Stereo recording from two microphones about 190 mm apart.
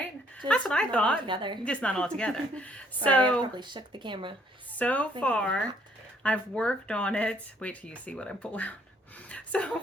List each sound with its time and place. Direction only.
0.0 s a woman's voice: 5° left (ahead or behind)
1.3 s speech: 25° right (ahead or behind)
1.6 s speech: 5° left (ahead or behind)
3.5 s speech: 25° right (ahead or behind)
4.8 s speech: 10° left (ahead or behind)
9.3 s a sound: 5° left (ahead or behind)